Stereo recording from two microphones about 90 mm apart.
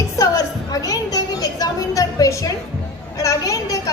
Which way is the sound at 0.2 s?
40° left (ahead or behind).